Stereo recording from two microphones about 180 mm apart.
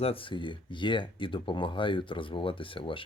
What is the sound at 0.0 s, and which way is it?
Speech, 30° left (ahead or behind).